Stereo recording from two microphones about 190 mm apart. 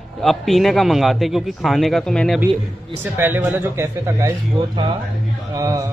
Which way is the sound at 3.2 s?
10° right (ahead or behind).